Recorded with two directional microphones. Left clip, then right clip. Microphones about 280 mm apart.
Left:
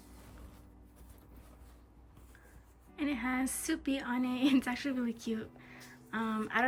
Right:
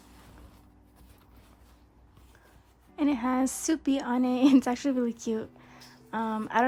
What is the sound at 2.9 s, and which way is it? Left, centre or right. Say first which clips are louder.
A woman's voice: right 7 dB; centre.